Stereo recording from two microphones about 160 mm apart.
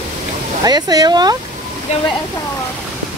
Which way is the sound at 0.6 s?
25° right (ahead or behind).